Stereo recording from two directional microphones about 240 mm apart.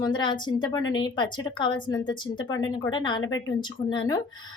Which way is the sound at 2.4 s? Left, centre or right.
Left.